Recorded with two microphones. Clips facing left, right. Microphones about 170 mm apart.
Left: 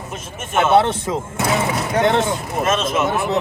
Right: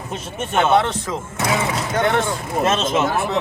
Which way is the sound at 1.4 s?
5° left (ahead or behind).